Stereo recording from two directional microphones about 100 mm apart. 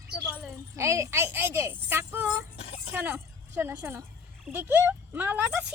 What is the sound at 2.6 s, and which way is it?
Speech, 90° left.